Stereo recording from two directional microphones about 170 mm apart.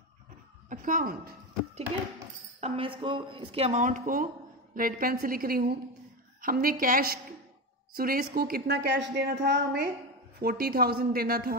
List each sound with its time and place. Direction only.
0.7 s a woman's voice: 50° right (ahead or behind)
2.6 s a woman's voice: 35° right (ahead or behind); by 9.8 s 90° right
10.4 s speech: 60° right (ahead or behind)